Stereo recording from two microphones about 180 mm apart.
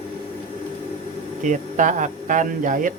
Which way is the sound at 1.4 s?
45° right (ahead or behind).